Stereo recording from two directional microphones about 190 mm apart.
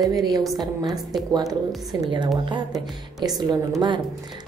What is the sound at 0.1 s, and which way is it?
Speech, 20° right (ahead or behind).